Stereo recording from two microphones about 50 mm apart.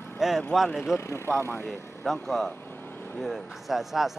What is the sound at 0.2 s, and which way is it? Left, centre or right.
Speech, centre.